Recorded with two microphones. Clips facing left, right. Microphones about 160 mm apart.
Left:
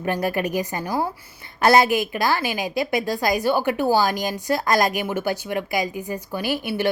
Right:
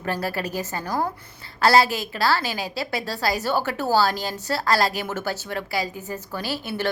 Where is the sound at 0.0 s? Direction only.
15° left (ahead or behind).